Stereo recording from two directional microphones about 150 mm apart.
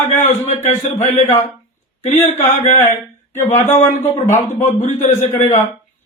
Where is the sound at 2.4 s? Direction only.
50° left (ahead or behind).